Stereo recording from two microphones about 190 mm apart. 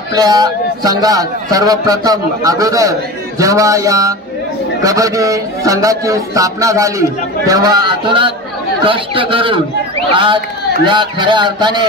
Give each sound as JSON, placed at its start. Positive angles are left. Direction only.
{"t": 0.1, "sound": "a man's voice", "side_deg": -20}